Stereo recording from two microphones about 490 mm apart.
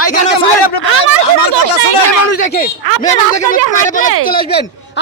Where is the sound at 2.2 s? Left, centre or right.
Left.